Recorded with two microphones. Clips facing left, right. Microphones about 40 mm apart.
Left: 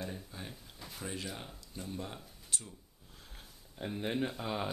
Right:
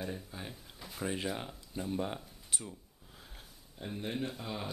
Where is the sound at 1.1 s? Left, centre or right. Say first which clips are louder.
Right 5 dB; right.